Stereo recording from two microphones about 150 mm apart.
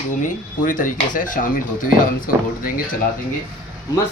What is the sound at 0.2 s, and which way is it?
Speech, 60° left (ahead or behind).